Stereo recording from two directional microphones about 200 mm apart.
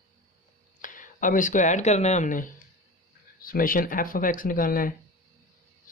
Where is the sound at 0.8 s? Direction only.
40° left (ahead or behind).